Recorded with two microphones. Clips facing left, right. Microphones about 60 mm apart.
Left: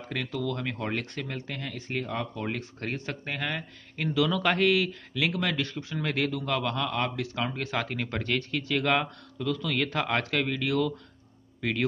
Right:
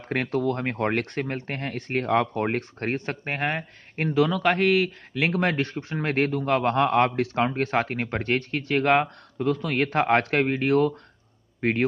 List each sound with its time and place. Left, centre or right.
0.1 s speech: right
1.2 s speech: right
4.3 s speech: centre; by 10.9 s right